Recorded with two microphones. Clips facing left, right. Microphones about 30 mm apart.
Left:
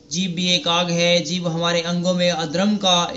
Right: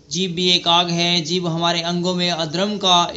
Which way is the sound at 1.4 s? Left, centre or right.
Right.